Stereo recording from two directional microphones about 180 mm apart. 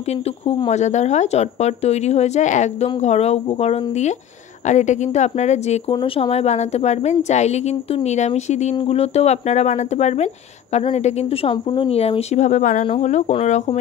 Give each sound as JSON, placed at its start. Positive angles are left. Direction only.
{"t": 0.5, "sound": "a woman's voice", "side_deg": 35}